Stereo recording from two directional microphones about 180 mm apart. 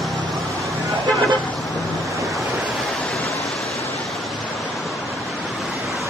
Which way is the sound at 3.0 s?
Centre (ahead or behind).